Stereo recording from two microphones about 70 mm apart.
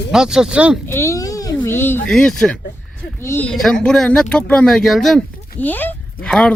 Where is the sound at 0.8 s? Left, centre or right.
Left.